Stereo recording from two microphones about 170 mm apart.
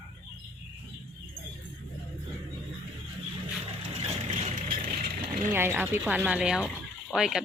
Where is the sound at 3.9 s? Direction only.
40° right (ahead or behind).